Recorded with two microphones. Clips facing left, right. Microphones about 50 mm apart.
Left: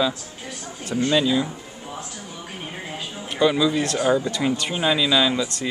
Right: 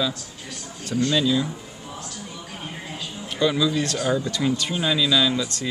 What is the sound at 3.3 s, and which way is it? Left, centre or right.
Speech, centre.